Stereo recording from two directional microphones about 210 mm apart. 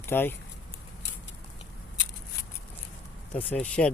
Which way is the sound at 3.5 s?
5° left (ahead or behind).